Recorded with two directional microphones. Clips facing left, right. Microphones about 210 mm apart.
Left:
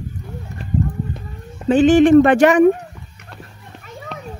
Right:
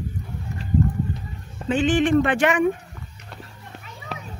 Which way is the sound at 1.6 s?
40° left (ahead or behind).